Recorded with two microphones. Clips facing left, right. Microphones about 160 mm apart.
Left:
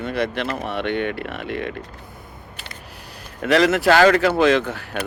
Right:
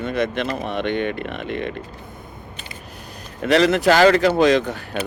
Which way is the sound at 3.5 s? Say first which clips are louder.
Even; 30° right (ahead or behind).